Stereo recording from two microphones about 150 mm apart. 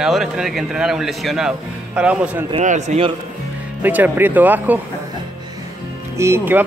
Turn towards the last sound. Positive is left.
turn(degrees=-15)  # may be behind; listen again after turning